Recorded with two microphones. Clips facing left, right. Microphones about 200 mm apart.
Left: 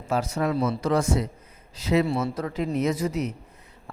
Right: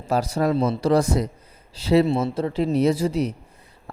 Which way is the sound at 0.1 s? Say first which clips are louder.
Right 4 dB; 35° right (ahead or behind).